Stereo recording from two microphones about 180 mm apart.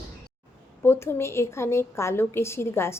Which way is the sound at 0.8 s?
15° left (ahead or behind).